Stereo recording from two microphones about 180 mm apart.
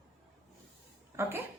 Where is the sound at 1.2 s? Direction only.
15° right (ahead or behind).